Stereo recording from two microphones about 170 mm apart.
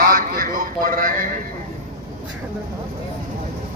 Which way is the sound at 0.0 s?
60° right (ahead or behind).